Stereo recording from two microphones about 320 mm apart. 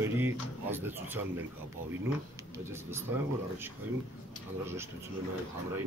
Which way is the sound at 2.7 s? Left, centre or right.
Centre.